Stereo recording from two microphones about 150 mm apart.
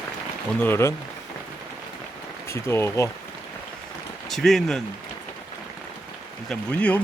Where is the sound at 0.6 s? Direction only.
15° left (ahead or behind).